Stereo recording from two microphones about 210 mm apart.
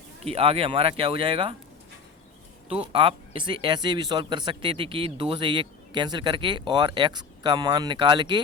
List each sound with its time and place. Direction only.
0.3 s speech: 30° right (ahead or behind)
2.6 s speech: 25° right (ahead or behind)